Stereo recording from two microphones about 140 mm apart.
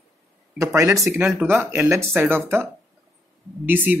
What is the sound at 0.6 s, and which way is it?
Speech, 20° right (ahead or behind).